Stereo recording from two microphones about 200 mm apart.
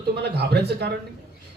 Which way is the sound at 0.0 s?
55° right (ahead or behind).